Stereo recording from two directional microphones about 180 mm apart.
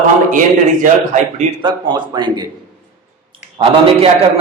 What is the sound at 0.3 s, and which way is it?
A man's voice, 45° right (ahead or behind).